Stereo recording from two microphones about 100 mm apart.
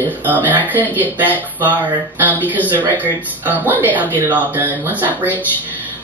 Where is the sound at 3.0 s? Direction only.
15° right (ahead or behind).